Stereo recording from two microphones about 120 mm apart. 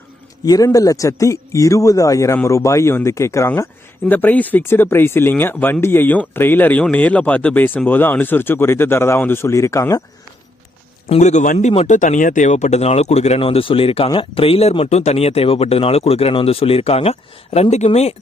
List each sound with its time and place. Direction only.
0.4 s speech: 30° left (ahead or behind)
11.1 s a man's voice: 75° left (ahead or behind)
11.9 s speech: 90° left; by 18.1 s 65° left (ahead or behind)